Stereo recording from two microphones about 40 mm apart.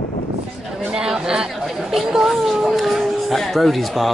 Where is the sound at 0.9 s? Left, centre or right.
Centre.